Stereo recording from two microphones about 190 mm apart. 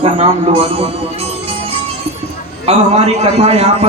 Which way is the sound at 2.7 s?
35° right (ahead or behind).